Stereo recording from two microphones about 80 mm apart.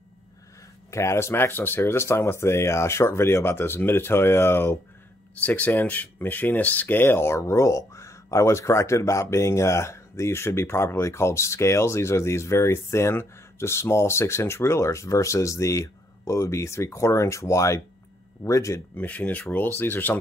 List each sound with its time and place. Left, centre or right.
0.8 s speech: left
18.9 s speech: left